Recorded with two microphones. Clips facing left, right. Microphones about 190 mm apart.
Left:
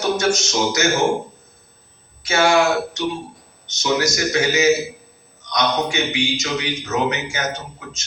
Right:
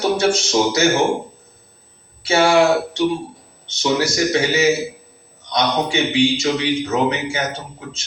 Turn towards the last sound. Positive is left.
turn(degrees=-30)  # may be behind; listen again after turning